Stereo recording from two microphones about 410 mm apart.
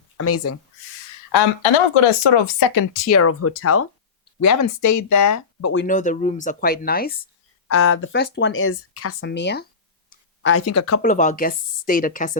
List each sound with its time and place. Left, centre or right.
0.2 s speech: left
1.3 s speech: left
2.2 s speech: left
3.1 s speech: left
5.7 s speech: centre
7.7 s speech: left
10.1 s a sound: left
11.0 s speech: centre